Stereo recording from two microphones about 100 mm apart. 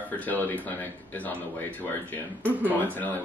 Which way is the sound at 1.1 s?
15° left (ahead or behind).